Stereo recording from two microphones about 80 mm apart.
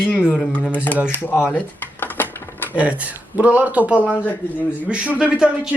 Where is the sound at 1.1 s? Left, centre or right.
Left.